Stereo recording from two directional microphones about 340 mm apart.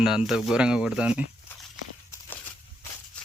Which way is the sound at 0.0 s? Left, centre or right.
Centre.